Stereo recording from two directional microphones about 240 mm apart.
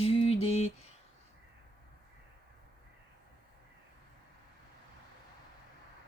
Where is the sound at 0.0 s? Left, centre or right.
Left.